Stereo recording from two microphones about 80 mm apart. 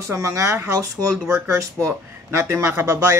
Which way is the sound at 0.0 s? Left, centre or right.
Right.